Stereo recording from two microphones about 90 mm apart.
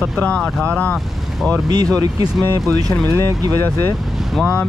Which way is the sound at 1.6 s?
45° right (ahead or behind).